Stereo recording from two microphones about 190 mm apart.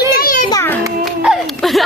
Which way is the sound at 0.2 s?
50° left (ahead or behind).